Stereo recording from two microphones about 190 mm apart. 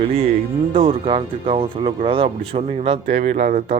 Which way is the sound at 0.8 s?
25° right (ahead or behind).